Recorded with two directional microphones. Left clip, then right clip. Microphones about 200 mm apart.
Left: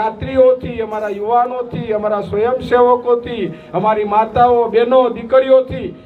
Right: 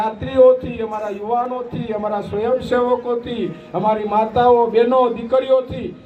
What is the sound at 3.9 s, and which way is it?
A man's voice, 30° right (ahead or behind).